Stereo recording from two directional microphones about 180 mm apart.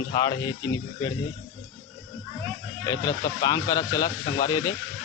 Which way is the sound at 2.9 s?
15° left (ahead or behind).